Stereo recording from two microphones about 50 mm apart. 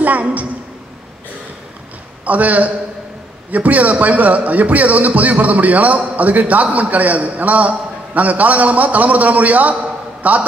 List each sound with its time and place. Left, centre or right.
0.0 s a woman's voice: right
2.2 s a man's voice: right